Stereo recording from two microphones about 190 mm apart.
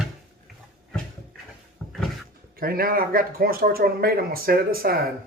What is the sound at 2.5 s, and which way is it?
Speech, 50° right (ahead or behind).